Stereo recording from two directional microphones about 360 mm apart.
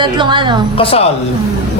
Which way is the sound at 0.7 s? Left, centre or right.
Centre.